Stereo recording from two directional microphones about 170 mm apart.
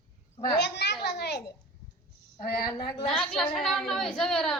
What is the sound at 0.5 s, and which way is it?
Speech, 80° left.